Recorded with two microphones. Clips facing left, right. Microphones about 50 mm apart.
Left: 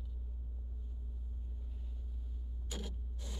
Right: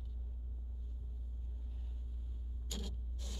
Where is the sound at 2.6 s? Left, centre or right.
Centre.